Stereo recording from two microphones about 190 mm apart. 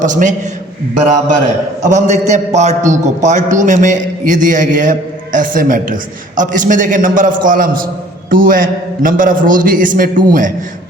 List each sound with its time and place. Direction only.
0.0 s a man's voice: 40° right (ahead or behind)
1.8 s a man's voice: 40° right (ahead or behind)